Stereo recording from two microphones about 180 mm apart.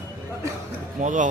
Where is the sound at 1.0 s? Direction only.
45° right (ahead or behind).